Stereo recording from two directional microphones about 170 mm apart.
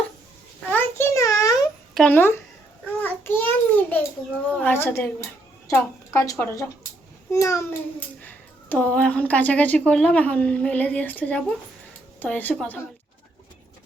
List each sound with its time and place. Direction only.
0.7 s a sound: 15° left (ahead or behind)
2.0 s a child's voice: 10° left (ahead or behind)
2.8 s babbling: 10° left (ahead or behind)
4.6 s a child's voice: 10° left (ahead or behind)